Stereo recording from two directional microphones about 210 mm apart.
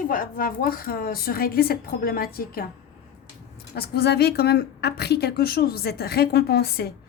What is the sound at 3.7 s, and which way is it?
A woman's voice, 50° left (ahead or behind).